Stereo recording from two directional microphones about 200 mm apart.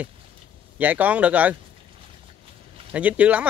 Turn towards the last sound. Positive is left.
turn(degrees=-5)  # may be behind; listen again after turning